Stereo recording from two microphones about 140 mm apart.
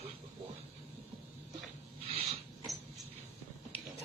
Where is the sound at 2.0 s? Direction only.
45° right (ahead or behind).